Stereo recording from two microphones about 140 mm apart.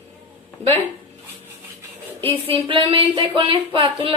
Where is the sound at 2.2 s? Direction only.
40° right (ahead or behind).